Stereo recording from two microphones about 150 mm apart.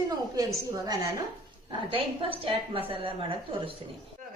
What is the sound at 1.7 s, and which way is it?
A woman's voice, 35° right (ahead or behind).